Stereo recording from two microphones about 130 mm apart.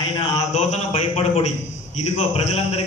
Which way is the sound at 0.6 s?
55° left (ahead or behind).